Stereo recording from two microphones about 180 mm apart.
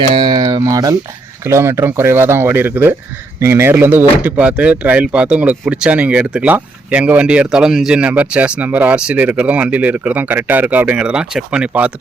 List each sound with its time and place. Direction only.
0.1 s speech: 25° right (ahead or behind); by 11.9 s 5° right (ahead or behind)